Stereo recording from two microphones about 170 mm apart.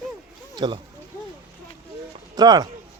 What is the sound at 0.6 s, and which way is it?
Speech, 25° right (ahead or behind).